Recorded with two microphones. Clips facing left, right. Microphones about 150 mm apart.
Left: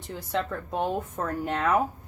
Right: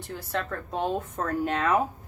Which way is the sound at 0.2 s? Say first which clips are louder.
Left 3 dB; 15° left (ahead or behind).